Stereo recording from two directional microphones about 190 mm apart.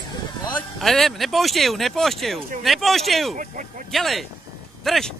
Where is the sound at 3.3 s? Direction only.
45° right (ahead or behind).